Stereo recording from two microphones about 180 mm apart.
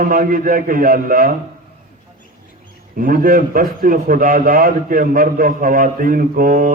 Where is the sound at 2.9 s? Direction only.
50° right (ahead or behind).